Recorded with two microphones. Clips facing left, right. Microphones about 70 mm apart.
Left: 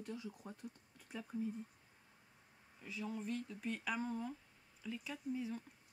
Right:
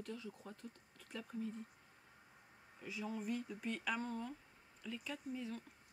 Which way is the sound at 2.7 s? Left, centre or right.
Centre.